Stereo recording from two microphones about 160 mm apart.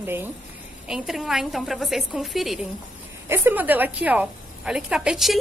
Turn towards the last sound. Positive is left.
turn(degrees=-5)  # may be behind; listen again after turning